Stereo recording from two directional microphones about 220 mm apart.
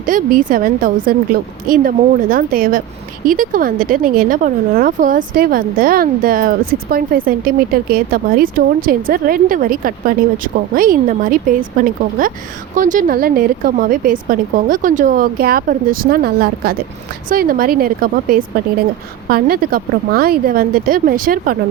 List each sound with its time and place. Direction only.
0.0 s speech: 35° right (ahead or behind)